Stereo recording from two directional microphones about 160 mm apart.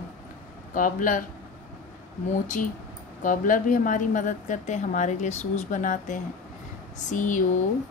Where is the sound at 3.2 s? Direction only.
55° left (ahead or behind).